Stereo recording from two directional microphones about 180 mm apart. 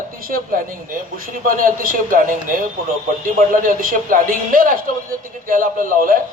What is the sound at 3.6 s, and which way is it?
A man's voice, 50° right (ahead or behind).